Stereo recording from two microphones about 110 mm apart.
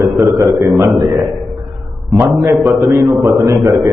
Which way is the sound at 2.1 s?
25° right (ahead or behind).